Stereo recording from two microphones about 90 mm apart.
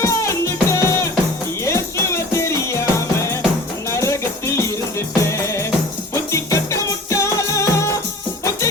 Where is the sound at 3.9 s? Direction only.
30° left (ahead or behind).